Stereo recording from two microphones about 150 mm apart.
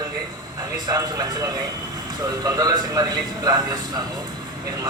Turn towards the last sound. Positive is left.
turn(degrees=-30)  # may be behind; listen again after turning